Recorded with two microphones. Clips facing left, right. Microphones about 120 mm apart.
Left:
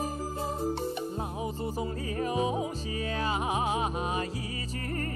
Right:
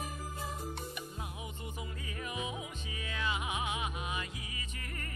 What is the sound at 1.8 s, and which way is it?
Music, 35° left (ahead or behind).